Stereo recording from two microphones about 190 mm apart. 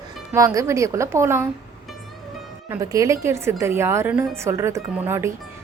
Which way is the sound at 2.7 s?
15° right (ahead or behind).